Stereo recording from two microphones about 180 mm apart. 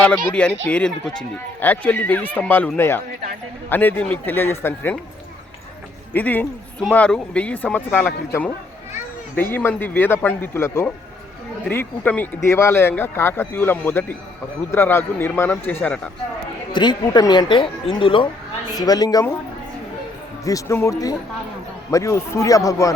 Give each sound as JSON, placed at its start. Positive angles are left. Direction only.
{"t": 0.3, "sound": "speech", "side_deg": 5}
{"t": 6.1, "sound": "speech", "side_deg": 10}
{"t": 16.7, "sound": "speech", "side_deg": 25}
{"t": 20.4, "sound": "speech", "side_deg": 20}